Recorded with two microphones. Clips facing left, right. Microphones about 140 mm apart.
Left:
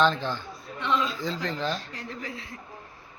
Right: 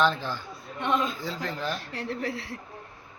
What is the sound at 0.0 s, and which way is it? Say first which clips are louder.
Speech: left 1 dB; 10° right (ahead or behind).